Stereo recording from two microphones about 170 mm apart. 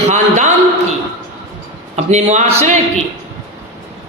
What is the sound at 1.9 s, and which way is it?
Speech, 40° right (ahead or behind).